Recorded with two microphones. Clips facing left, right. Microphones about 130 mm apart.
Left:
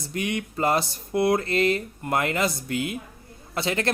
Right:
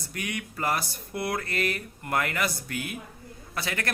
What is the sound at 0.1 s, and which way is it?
Speech, 25° left (ahead or behind).